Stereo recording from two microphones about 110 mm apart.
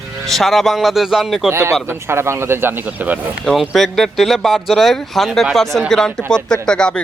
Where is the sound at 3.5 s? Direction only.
Centre (ahead or behind).